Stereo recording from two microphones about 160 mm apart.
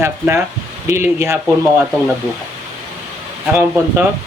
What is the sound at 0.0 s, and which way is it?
Speech, 15° right (ahead or behind).